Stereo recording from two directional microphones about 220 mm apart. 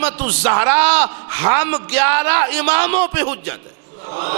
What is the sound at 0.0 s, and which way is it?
A man's voice, 10° right (ahead or behind).